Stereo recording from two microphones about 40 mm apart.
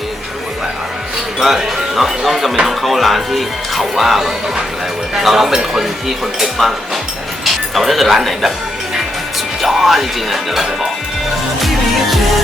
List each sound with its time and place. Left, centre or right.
1.4 s speech: centre
9.6 s speech: centre
11.6 s music: centre